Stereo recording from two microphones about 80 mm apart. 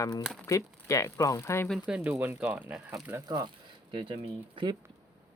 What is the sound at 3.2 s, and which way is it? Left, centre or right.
Speech, right.